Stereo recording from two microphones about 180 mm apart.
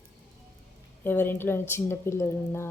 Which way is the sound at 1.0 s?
10° left (ahead or behind).